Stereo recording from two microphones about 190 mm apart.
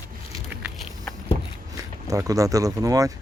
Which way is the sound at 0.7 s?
Centre (ahead or behind).